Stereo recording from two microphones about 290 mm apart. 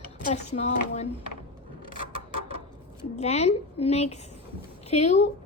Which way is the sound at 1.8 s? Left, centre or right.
Left.